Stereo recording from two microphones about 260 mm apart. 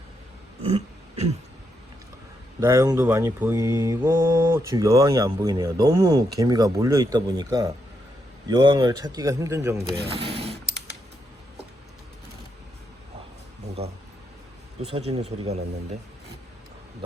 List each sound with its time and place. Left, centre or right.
2.6 s mantra: centre
10.1 s speech: right
13.8 s a sound: right
14.8 s speech: right